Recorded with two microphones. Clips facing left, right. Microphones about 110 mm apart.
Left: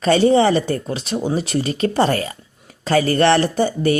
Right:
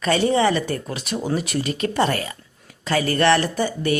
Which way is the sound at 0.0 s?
30° left (ahead or behind).